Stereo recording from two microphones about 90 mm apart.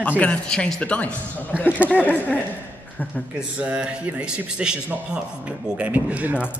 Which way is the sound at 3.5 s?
15° right (ahead or behind).